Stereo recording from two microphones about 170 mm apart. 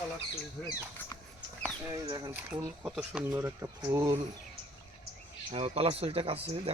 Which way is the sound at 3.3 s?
20° right (ahead or behind).